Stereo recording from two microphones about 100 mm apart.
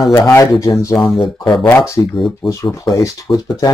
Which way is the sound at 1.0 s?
Centre (ahead or behind).